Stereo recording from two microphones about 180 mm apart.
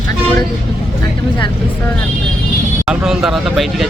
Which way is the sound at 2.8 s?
5° right (ahead or behind).